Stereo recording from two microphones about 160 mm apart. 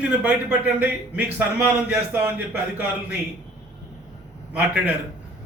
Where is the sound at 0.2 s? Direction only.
10° right (ahead or behind).